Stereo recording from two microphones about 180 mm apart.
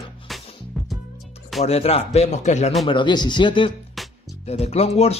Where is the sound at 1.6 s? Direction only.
35° left (ahead or behind).